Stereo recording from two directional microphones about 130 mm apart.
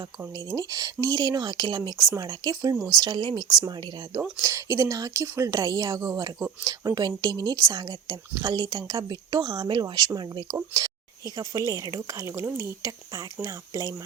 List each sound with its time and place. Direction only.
0.3 s speech: 25° right (ahead or behind)
4.2 s speech: 20° right (ahead or behind)